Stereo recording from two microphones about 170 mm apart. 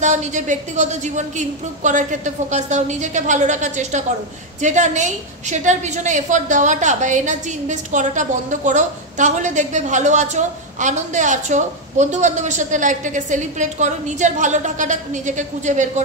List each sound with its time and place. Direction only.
0.0 s a woman's voice: 45° right (ahead or behind)